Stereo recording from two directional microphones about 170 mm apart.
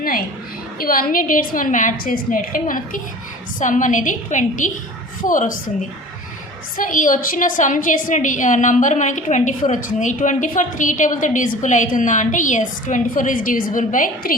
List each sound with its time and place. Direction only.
0.8 s a woman's voice: 55° left (ahead or behind)
6.7 s a woman's voice: 50° left (ahead or behind)